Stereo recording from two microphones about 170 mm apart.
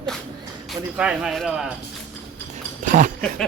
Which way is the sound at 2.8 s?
50° right (ahead or behind).